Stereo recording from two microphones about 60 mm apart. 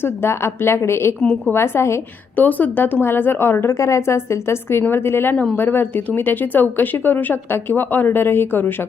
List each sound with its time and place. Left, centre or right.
0.0 s a woman's voice: left
2.3 s a woman's voice: left